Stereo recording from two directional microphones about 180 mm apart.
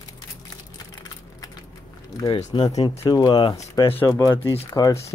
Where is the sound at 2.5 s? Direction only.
30° left (ahead or behind).